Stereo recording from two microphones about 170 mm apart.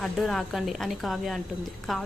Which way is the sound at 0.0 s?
Centre (ahead or behind).